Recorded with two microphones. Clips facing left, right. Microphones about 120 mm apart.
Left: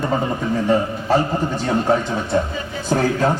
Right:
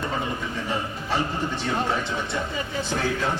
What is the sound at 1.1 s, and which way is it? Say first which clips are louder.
A man's voice: left 8 dB; 45° left (ahead or behind).